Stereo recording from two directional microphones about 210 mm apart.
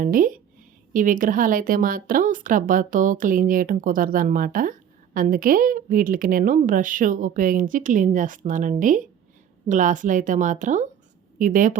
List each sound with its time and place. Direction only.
0.0 s speech: 40° right (ahead or behind)